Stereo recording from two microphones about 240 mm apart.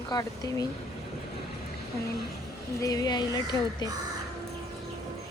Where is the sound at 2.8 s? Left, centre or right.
Centre.